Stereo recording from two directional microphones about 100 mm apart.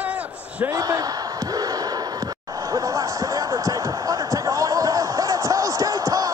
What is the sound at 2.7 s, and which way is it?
Basketball bounce, 35° right (ahead or behind).